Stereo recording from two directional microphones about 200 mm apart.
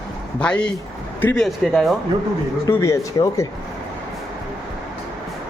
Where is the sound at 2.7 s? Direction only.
15° left (ahead or behind).